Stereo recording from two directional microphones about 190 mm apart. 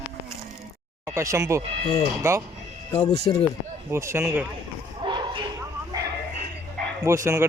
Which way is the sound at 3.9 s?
15° right (ahead or behind).